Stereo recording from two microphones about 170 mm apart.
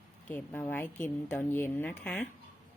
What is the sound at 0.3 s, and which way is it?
A woman's voice, 10° left (ahead or behind).